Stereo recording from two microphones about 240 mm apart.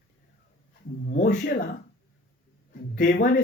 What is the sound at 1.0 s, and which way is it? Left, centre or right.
Speech, left.